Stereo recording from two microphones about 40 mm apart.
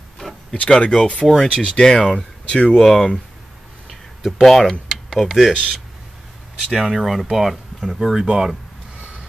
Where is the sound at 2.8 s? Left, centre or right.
Centre.